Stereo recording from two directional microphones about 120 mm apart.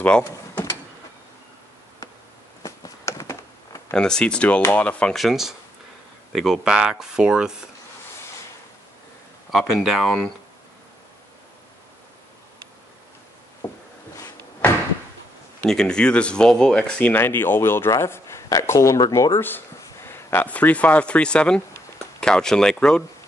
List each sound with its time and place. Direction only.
0.2 s power windows: 20° left (ahead or behind)
2.6 s a sound: 30° left (ahead or behind)
3.9 s speech: 5° left (ahead or behind)
9.5 s speech: centre (ahead or behind)
13.6 s a sound: 15° left (ahead or behind)
15.6 s speech: 5° left (ahead or behind)